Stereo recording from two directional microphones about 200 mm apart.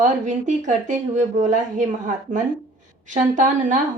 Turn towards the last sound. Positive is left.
turn(degrees=-40)  # may be behind; listen again after turning